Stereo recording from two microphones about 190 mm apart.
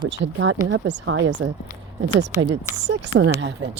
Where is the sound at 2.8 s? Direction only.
80° right.